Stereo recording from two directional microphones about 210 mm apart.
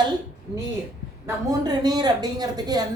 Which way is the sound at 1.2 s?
20° right (ahead or behind).